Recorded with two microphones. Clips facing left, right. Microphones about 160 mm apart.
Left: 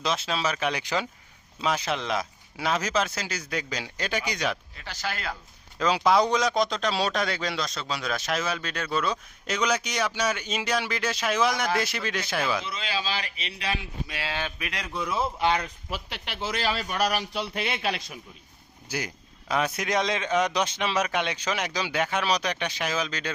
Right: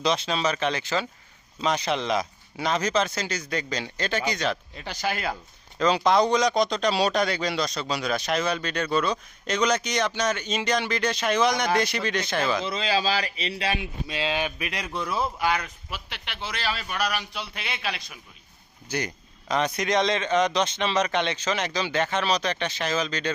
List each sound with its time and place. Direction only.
0.0 s speech: 5° left (ahead or behind)
4.8 s speech: 15° right (ahead or behind)
5.8 s speech: 5° left (ahead or behind)
12.6 s speech: 35° right (ahead or behind); by 14.5 s 20° right (ahead or behind)
14.6 s speech: centre (ahead or behind)
15.2 s a man's voice: 25° left (ahead or behind)
18.9 s speech: 5° left (ahead or behind)